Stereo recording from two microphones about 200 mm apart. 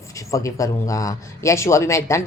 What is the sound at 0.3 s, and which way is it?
Speech, 15° left (ahead or behind).